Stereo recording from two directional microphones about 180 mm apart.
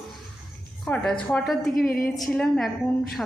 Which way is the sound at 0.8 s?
5° left (ahead or behind).